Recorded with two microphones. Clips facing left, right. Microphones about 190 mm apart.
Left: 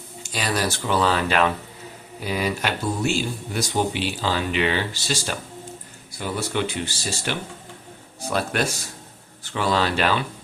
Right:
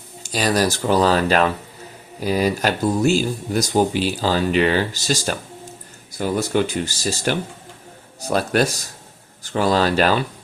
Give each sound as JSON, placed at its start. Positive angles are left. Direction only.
{"t": 0.2, "sound": "speech", "side_deg": -40}